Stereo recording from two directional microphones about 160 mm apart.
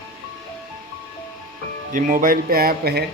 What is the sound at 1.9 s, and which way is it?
Speech, 60° right (ahead or behind).